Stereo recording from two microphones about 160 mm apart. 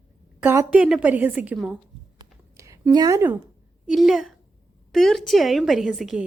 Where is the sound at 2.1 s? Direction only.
20° right (ahead or behind).